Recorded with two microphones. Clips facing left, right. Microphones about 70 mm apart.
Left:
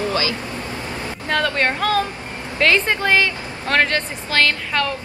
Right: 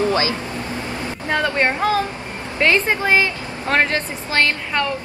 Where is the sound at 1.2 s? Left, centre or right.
Centre.